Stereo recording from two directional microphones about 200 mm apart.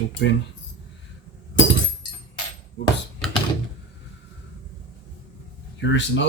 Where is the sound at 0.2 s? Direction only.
60° left (ahead or behind).